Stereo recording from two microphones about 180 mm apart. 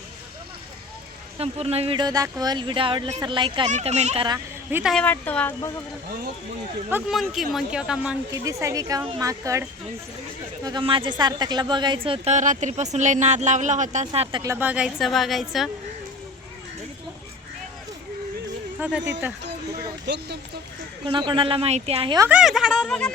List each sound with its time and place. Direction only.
1.4 s speech: 35° right (ahead or behind)
3.7 s speech: 40° right (ahead or behind)
4.7 s a woman's voice: 5° right (ahead or behind)
5.0 s speech: 10° left (ahead or behind)
6.9 s a woman's voice: centre (ahead or behind)
8.3 s speech: 20° right (ahead or behind); by 14.4 s 35° right (ahead or behind)
14.4 s a woman's voice: 10° right (ahead or behind)
18.8 s speech: 5° right (ahead or behind)
20.1 s speech: 65° right (ahead or behind)
21.1 s speech: 25° right (ahead or behind)
22.2 s a woman's voice: 5° right (ahead or behind)